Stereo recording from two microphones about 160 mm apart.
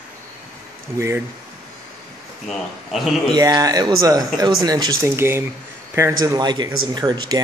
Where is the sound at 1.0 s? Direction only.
15° right (ahead or behind).